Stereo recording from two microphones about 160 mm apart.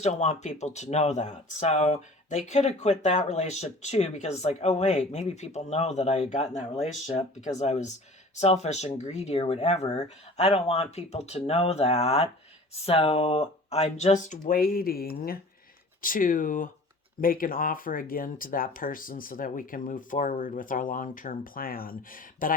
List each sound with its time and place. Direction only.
0.0 s speech: 45° left (ahead or behind); by 15.4 s 70° left (ahead or behind)
16.0 s speech: 60° left (ahead or behind)